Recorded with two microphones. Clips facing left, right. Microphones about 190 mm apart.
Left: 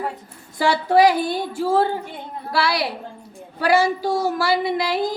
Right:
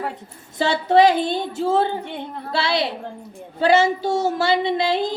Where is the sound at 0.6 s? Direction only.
25° right (ahead or behind).